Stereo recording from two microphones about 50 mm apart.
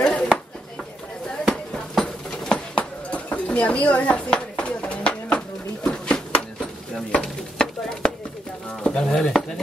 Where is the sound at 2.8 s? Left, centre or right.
Left.